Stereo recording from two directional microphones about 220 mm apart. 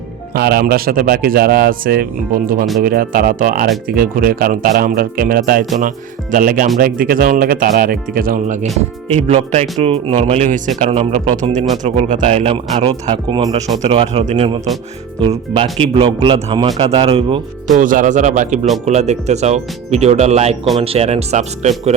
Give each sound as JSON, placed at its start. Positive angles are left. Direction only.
{"t": 0.3, "sound": "speech", "side_deg": -45}
{"t": 17.7, "sound": "speech", "side_deg": -35}